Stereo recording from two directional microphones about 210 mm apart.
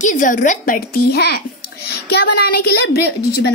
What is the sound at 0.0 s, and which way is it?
A woman's voice, 40° left (ahead or behind).